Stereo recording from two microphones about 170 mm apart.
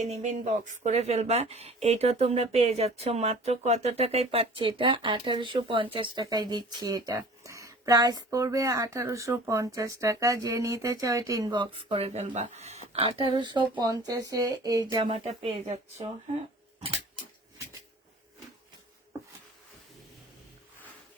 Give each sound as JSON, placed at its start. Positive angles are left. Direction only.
{"t": 0.0, "sound": "speech", "side_deg": -40}